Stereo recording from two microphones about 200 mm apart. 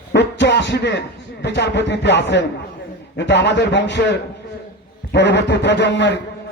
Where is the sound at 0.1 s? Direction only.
60° left (ahead or behind).